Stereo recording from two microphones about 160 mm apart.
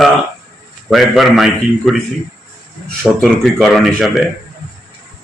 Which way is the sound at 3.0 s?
5° left (ahead or behind).